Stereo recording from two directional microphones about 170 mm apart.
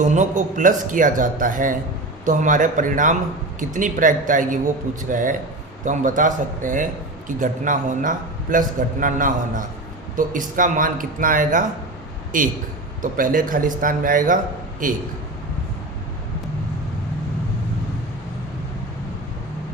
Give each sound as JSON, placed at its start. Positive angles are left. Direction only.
{"t": 0.0, "sound": "a man's voice", "side_deg": -45}